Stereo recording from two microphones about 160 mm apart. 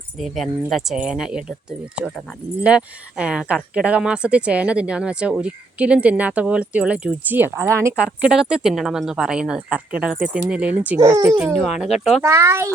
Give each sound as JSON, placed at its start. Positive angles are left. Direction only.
{"t": 0.2, "sound": "speech", "side_deg": 0}
{"t": 2.6, "sound": "speech", "side_deg": -5}
{"t": 8.0, "sound": "speech", "side_deg": -5}
{"t": 11.9, "sound": "speech", "side_deg": 0}
{"t": 12.2, "sound": "speech", "side_deg": -15}